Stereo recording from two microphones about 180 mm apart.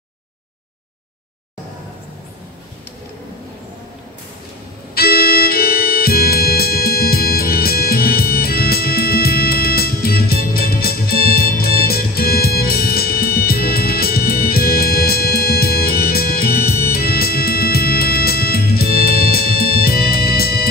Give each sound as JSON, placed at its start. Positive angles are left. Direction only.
{"t": 4.9, "sound": "music", "side_deg": 60}